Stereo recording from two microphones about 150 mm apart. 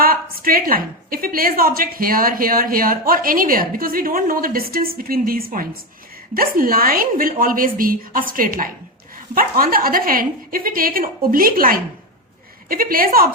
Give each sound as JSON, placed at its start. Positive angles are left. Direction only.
{"t": 0.0, "sound": "a woman's voice", "side_deg": -75}